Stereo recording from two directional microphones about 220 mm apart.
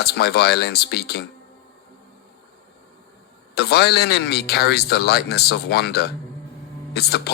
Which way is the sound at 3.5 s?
45° left (ahead or behind).